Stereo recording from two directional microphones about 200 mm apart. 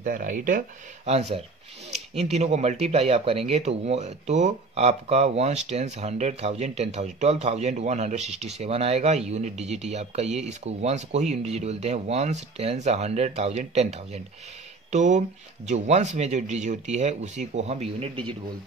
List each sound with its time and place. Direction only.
0.0 s speech: 40° right (ahead or behind)